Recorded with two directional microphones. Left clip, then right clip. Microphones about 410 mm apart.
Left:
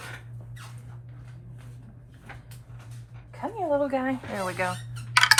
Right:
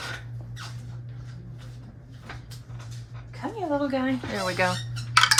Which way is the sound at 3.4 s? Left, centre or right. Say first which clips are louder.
Left 2 dB; centre.